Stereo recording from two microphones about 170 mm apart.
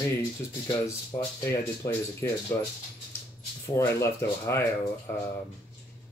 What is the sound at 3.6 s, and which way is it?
Speech, 15° left (ahead or behind).